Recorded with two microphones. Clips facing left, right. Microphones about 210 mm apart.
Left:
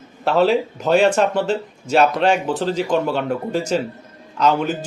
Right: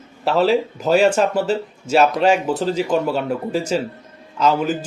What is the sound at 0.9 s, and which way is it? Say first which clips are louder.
Speech: even; 40° right (ahead or behind).